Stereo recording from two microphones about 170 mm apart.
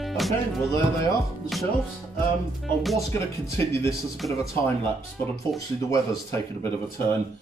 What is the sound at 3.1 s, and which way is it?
Speech, 15° left (ahead or behind).